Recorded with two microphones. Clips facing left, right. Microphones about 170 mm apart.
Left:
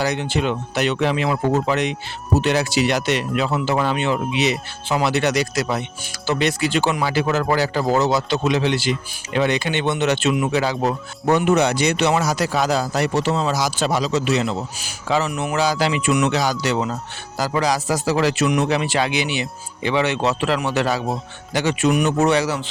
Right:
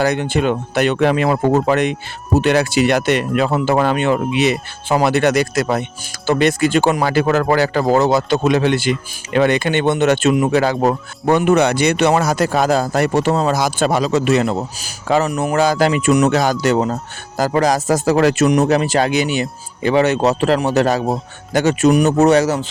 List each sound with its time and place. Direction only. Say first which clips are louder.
0.0 s speech: right 5 dB; 55° right (ahead or behind)